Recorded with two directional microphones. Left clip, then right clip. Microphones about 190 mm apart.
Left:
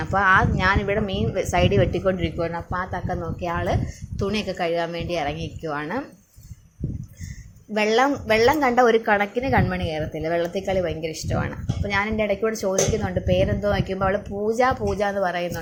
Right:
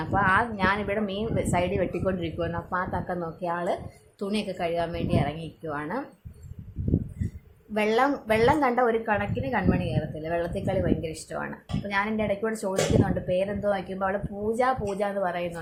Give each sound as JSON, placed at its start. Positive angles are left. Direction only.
{"t": 0.0, "sound": "speech", "side_deg": 20}
{"t": 7.7, "sound": "speech", "side_deg": 15}